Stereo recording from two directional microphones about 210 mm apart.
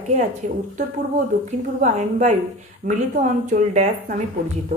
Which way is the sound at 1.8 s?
35° right (ahead or behind).